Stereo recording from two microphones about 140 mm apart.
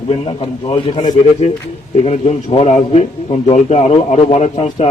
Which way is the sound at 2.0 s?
50° left (ahead or behind).